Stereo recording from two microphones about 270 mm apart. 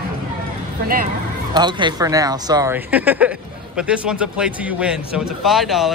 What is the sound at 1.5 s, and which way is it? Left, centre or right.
Speech, centre.